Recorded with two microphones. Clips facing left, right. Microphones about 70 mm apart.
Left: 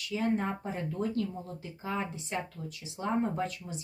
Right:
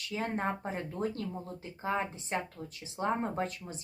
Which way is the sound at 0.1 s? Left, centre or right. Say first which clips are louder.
Left 3 dB; right.